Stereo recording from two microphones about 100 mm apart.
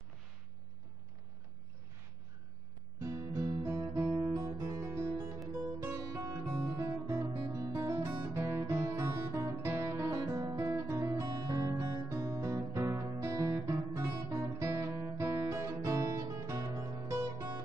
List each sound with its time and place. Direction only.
3.0 s guitar: 30° right (ahead or behind)
4.6 s music: 25° right (ahead or behind)
5.9 s guitar: 35° right (ahead or behind)
8.3 s music: 30° right (ahead or behind)
10.0 s guitar: 35° right (ahead or behind)